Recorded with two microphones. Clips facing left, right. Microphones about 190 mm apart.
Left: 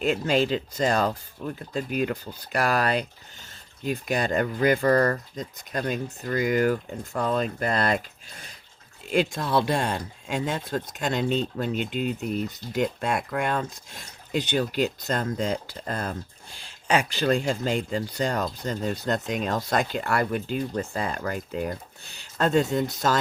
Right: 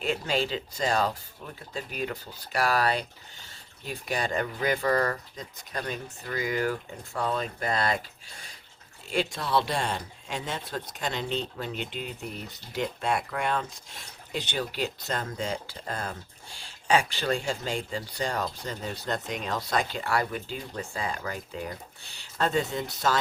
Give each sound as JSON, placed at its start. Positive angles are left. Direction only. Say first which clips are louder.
{"t": 0.0, "sound": "speech", "louder": "left 5 dB", "side_deg": 45}
{"t": 9.1, "sound": "speech", "louder": "left 4 dB", "side_deg": 50}
{"t": 12.7, "sound": "speech", "louder": "left 3 dB", "side_deg": 50}